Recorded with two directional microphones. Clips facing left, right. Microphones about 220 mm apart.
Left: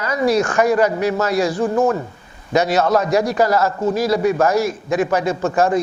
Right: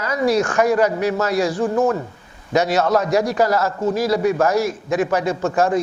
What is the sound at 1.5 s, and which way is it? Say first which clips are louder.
Speech: left 1 dB; 25° left (ahead or behind).